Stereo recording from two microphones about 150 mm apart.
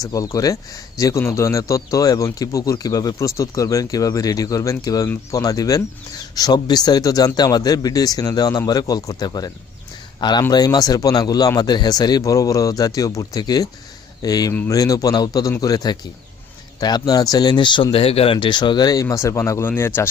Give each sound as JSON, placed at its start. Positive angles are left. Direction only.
{"t": 0.0, "sound": "a man's voice", "side_deg": 20}